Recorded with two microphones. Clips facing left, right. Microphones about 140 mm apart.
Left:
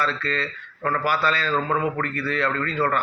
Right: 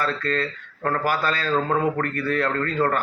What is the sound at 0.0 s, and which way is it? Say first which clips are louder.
A man's voice: right 2 dB; 45° right (ahead or behind).